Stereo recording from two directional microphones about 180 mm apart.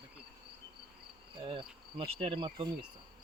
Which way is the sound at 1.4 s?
30° right (ahead or behind).